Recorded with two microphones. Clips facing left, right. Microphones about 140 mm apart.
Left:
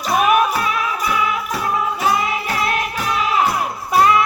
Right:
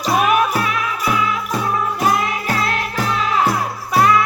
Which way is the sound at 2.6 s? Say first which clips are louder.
Even; 15° left (ahead or behind).